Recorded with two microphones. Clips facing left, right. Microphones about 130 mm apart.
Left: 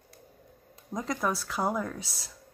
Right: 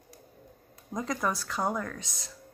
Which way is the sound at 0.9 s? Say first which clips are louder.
Even; centre (ahead or behind).